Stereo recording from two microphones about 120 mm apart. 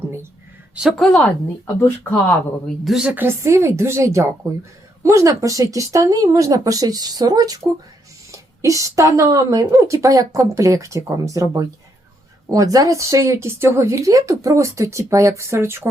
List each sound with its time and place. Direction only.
0.8 s a woman's voice: 5° right (ahead or behind)
1.0 s speech: 5° left (ahead or behind)
1.6 s speech: 20° left (ahead or behind)
2.8 s a woman's voice: 5° right (ahead or behind)
3.2 s speech: 25° right (ahead or behind)